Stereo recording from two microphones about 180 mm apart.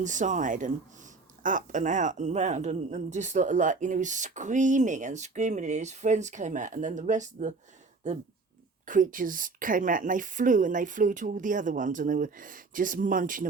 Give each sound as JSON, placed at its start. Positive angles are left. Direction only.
{"t": 0.0, "sound": "speech", "side_deg": -45}
{"t": 8.9, "sound": "speech", "side_deg": -50}